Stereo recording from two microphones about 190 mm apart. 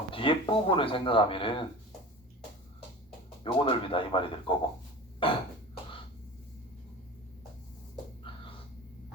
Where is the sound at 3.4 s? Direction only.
25° left (ahead or behind).